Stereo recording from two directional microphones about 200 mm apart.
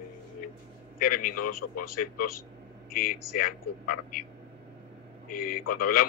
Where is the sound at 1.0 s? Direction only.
45° left (ahead or behind).